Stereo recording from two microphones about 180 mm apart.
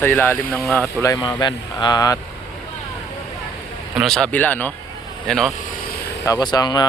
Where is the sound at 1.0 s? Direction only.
20° left (ahead or behind).